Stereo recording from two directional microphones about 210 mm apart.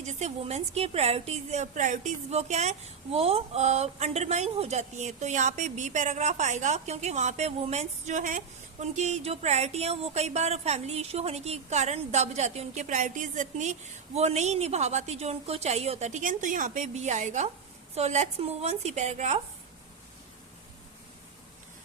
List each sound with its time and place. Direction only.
0.0 s a woman's voice: 30° right (ahead or behind)